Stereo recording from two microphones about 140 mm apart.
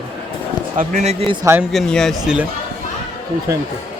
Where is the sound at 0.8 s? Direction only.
60° right (ahead or behind).